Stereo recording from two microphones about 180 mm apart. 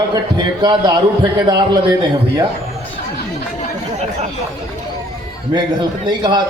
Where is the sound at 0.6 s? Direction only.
25° right (ahead or behind).